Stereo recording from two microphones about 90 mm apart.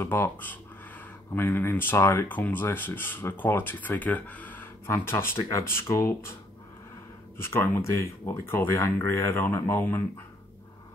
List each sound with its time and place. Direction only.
0.0 s speech: 25° left (ahead or behind)
7.3 s speech: 25° left (ahead or behind)